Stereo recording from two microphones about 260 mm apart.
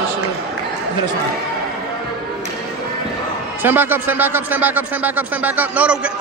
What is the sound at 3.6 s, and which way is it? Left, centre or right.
A man's voice, centre.